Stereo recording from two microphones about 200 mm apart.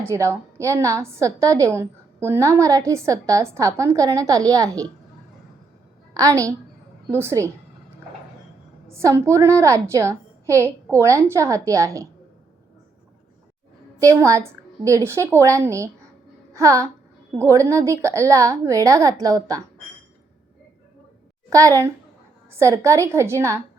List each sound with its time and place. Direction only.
0.0 s a woman's voice: 15° right (ahead or behind)
6.1 s a woman's voice: 15° right (ahead or behind)
8.9 s a woman's voice: 15° right (ahead or behind)
14.0 s a woman's voice: 15° right (ahead or behind)
21.5 s a woman's voice: 15° right (ahead or behind)